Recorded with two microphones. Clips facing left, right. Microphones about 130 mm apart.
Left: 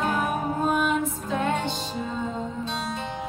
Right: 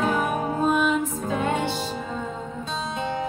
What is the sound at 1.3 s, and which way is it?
Music, 10° right (ahead or behind).